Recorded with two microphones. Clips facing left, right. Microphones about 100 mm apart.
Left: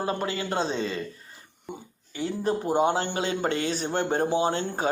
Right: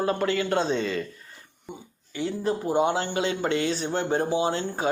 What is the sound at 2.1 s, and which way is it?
Speech, 35° left (ahead or behind).